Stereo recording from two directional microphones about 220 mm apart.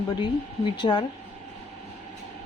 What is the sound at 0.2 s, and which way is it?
Speech, 20° left (ahead or behind).